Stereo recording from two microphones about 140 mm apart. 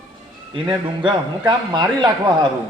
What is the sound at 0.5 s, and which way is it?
A man's voice, 35° right (ahead or behind).